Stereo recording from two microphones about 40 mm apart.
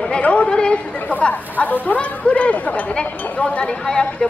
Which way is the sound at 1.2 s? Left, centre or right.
Left.